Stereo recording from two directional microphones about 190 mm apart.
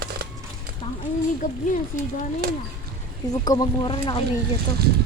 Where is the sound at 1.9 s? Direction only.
40° left (ahead or behind).